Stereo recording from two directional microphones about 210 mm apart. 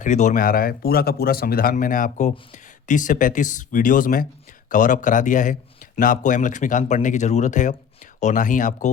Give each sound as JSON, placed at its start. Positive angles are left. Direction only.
{"t": 0.0, "sound": "speech", "side_deg": 35}